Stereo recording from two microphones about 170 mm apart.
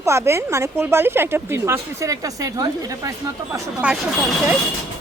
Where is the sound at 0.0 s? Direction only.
15° right (ahead or behind).